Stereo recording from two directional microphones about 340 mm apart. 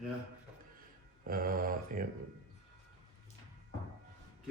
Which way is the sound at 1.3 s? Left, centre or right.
Right.